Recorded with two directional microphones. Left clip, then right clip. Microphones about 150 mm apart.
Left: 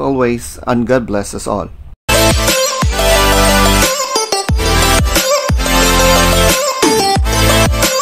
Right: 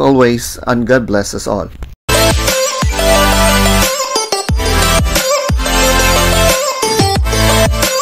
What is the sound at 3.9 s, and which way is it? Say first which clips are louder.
Music: even; centre (ahead or behind).